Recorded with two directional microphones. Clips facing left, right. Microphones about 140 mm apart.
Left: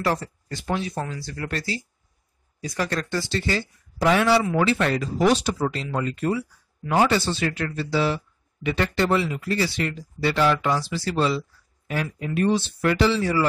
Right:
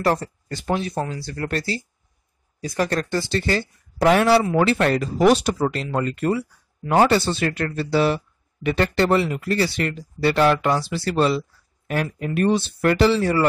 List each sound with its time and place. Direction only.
0.0 s speech: 45° right (ahead or behind)
0.9 s speech: 30° right (ahead or behind)
1.2 s speech: 45° right (ahead or behind)
2.8 s speech: 45° right (ahead or behind)
3.3 s speech: 55° right (ahead or behind)